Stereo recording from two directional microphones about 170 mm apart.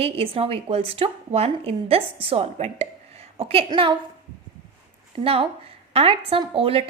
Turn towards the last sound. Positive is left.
turn(degrees=-35)  # may be behind; listen again after turning